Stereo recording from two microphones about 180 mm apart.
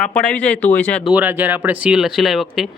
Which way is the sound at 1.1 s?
10° right (ahead or behind).